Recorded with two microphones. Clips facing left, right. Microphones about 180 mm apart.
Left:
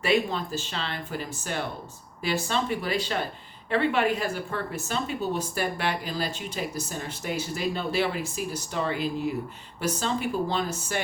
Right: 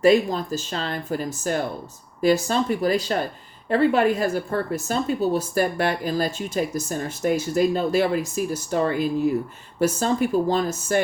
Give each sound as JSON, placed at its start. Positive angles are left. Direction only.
{"t": 0.0, "sound": "speech", "side_deg": -40}